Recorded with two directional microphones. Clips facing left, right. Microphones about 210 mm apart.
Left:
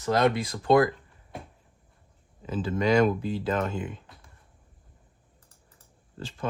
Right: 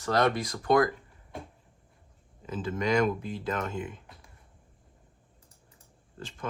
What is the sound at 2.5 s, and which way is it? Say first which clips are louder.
Speech: left 4 dB; 30° left (ahead or behind).